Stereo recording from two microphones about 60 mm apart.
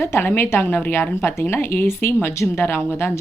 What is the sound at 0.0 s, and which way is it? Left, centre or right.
Speech, left.